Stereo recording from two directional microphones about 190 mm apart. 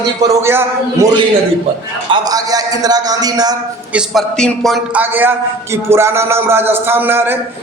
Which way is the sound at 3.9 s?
Centre (ahead or behind).